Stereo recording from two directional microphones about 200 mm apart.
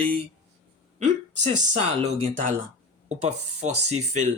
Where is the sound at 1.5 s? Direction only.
35° right (ahead or behind).